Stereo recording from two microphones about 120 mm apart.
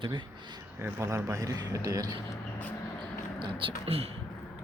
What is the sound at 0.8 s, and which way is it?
A man's voice, 20° right (ahead or behind).